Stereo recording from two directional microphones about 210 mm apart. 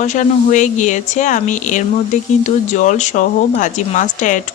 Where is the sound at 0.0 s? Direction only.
35° left (ahead or behind).